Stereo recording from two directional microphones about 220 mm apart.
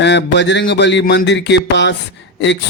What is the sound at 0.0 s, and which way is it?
Speech, 50° left (ahead or behind).